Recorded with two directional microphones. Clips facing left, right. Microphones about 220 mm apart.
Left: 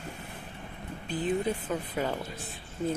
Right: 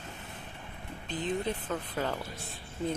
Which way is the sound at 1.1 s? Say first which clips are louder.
Left 3 dB; 10° left (ahead or behind).